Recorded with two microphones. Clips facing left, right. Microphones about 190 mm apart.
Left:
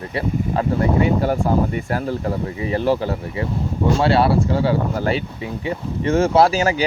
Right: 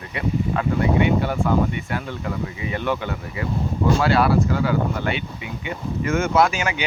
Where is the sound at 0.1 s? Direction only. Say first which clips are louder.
Left 1 dB; 35° left (ahead or behind).